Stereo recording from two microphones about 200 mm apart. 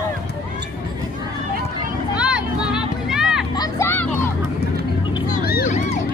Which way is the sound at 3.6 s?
10° left (ahead or behind).